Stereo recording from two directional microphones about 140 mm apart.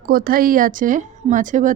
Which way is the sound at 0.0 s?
90° right.